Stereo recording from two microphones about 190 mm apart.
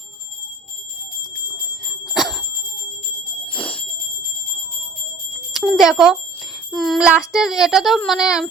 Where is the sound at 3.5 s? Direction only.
5° left (ahead or behind).